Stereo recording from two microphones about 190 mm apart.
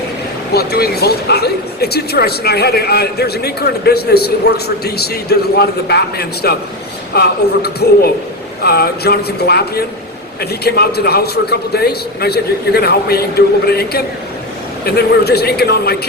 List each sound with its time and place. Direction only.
0.5 s speech: 55° left (ahead or behind)